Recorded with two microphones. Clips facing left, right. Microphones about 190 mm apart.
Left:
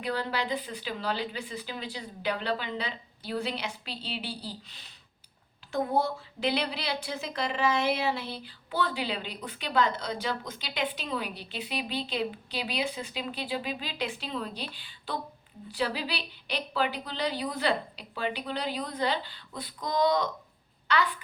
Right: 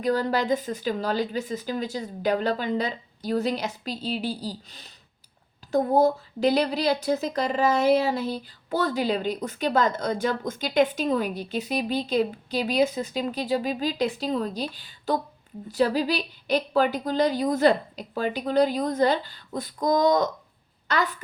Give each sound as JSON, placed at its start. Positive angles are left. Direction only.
{"t": 0.0, "sound": "a woman's voice", "side_deg": -45}